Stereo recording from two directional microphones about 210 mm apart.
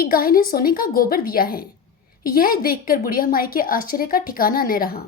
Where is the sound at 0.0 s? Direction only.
45° left (ahead or behind).